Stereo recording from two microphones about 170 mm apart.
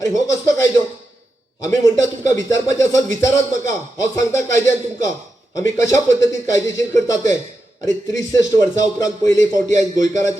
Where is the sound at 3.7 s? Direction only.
45° right (ahead or behind).